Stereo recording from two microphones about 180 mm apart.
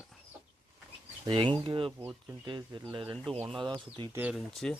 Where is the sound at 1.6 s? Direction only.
30° right (ahead or behind).